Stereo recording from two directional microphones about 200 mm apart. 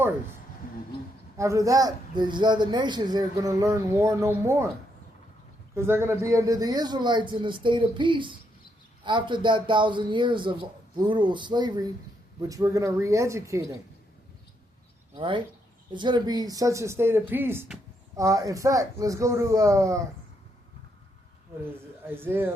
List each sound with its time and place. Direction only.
1.4 s speech: 15° right (ahead or behind)
5.7 s speech: 10° right (ahead or behind)
15.1 s speech: 25° right (ahead or behind)
21.6 s a man's voice: 10° right (ahead or behind)